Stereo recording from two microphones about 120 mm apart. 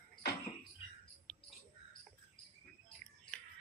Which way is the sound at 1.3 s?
5° left (ahead or behind).